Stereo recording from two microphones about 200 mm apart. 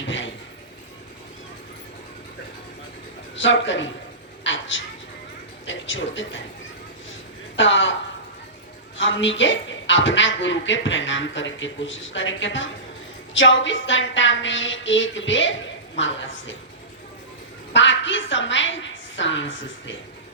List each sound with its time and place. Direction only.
0.0 s a sound: 65° left (ahead or behind)
3.3 s speech: 65° left (ahead or behind)
4.4 s a sound: 70° left (ahead or behind)
5.6 s speech: 70° left (ahead or behind)
7.5 s a woman's voice: 65° left (ahead or behind)
9.0 s speech: 70° left (ahead or behind)
17.7 s a woman's voice: 65° left (ahead or behind)